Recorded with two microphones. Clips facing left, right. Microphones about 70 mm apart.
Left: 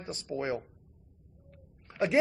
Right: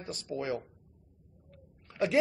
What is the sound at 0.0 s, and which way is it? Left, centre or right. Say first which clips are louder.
Speech: left 1 dB; left.